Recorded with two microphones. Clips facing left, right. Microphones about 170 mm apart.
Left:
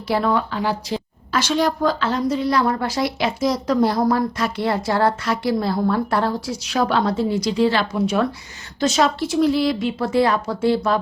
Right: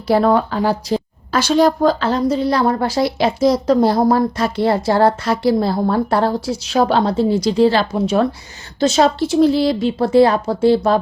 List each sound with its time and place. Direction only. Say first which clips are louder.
0.1 s a woman's voice: right 6 dB; 40° right (ahead or behind)